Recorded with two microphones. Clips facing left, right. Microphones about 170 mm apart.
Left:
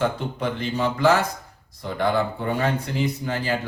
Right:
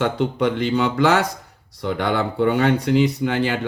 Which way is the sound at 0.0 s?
70° right (ahead or behind).